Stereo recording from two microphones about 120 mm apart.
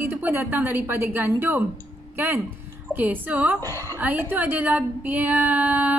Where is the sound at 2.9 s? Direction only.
15° right (ahead or behind).